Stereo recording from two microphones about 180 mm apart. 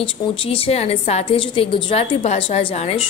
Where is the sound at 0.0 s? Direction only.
30° left (ahead or behind).